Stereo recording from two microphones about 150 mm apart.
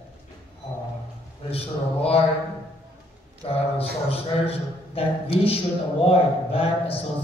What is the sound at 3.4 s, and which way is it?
A man's voice, 40° left (ahead or behind).